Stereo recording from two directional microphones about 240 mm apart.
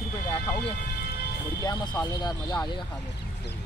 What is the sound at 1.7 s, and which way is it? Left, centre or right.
Speech, centre.